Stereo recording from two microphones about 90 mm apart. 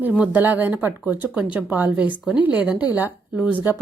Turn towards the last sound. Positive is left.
turn(degrees=-20)  # may be behind; listen again after turning